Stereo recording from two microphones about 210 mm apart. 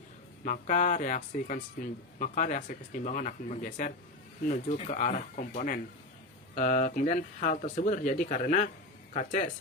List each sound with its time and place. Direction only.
0.4 s speech: 35° left (ahead or behind)